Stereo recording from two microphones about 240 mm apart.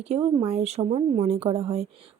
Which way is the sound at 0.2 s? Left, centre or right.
Right.